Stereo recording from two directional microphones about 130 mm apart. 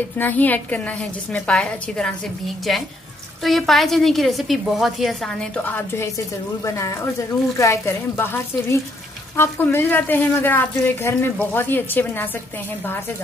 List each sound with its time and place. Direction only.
0.2 s a woman's voice: 15° left (ahead or behind)
5.6 s speech: 15° left (ahead or behind)